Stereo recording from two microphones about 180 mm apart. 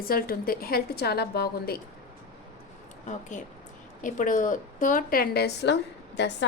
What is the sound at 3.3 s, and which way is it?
A woman's voice, 45° left (ahead or behind).